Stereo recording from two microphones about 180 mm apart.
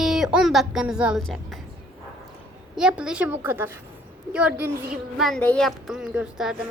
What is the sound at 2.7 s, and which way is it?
A woman's voice, 5° right (ahead or behind).